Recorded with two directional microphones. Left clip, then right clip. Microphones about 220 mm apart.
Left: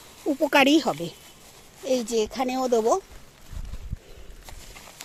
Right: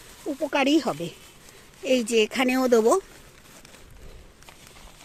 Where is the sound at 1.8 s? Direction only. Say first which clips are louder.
Right 3 dB; 20° right (ahead or behind).